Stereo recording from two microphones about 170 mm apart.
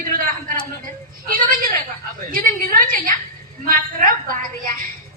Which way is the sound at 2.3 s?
55° right (ahead or behind).